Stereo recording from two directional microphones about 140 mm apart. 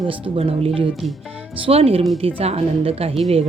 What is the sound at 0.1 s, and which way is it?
Speech, 45° right (ahead or behind).